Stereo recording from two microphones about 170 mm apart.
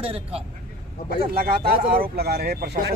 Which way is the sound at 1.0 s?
60° right (ahead or behind).